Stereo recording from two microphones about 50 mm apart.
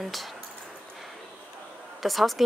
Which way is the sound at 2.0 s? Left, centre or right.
Centre.